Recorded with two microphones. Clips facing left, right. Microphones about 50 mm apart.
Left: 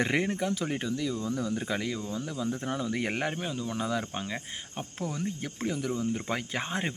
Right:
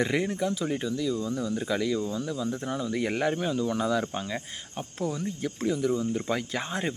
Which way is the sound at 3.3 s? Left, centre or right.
Centre.